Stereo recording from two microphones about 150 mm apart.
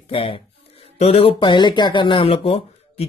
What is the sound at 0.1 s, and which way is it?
Speech, 35° left (ahead or behind).